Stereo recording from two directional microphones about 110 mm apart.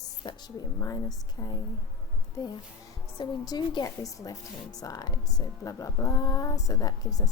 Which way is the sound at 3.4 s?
35° left (ahead or behind).